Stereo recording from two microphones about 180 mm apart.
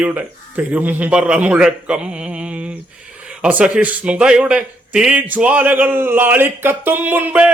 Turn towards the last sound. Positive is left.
turn(degrees=-10)  # may be behind; listen again after turning